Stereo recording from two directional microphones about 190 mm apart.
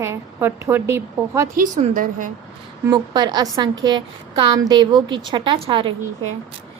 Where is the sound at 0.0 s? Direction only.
15° right (ahead or behind).